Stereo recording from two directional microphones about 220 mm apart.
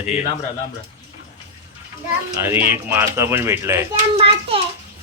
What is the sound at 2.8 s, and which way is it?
Speech, 10° right (ahead or behind).